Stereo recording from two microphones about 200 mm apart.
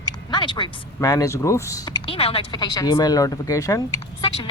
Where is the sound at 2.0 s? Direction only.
30° left (ahead or behind).